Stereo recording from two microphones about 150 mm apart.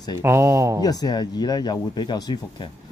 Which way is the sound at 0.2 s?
15° right (ahead or behind).